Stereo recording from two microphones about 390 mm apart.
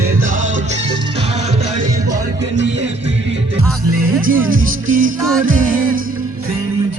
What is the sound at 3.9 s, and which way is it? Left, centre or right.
Music, right.